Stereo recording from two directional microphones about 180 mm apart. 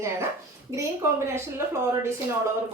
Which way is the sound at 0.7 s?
15° right (ahead or behind).